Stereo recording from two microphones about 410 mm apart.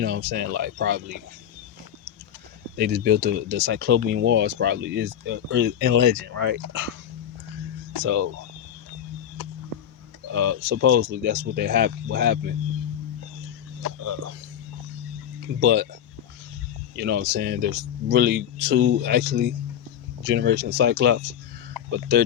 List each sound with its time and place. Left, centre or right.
0.0 s speech: right
2.7 s speech: right
10.3 s speech: right
14.0 s speech: right
15.6 s speech: right
16.9 s speech: right